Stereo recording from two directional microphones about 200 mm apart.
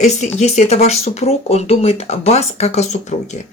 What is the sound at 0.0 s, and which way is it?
Speech, 35° left (ahead or behind).